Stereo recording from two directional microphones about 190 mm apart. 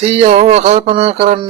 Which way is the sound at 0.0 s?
35° right (ahead or behind).